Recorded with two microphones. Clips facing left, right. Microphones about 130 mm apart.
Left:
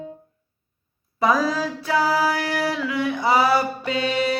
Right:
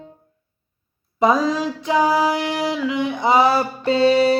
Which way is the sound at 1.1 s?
20° right (ahead or behind).